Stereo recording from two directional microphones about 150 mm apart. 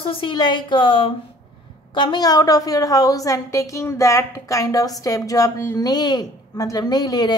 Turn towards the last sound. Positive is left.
turn(degrees=25)  # may be behind; listen again after turning